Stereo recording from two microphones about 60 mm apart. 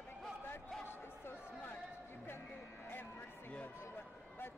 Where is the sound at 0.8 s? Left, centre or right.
Left.